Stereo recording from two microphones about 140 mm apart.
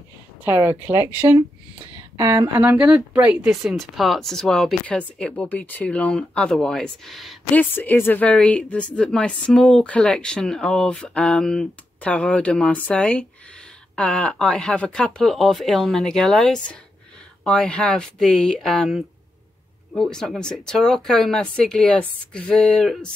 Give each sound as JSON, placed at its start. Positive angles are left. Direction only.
{"t": 0.4, "sound": "a woman's voice", "side_deg": -15}
{"t": 2.2, "sound": "speech", "side_deg": -20}
{"t": 2.8, "sound": "speech", "side_deg": -5}
{"t": 7.5, "sound": "speech", "side_deg": 15}